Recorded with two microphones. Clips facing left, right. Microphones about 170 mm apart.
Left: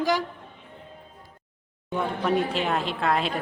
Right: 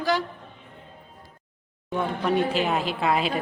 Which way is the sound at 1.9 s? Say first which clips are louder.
Right 1 dB; centre (ahead or behind).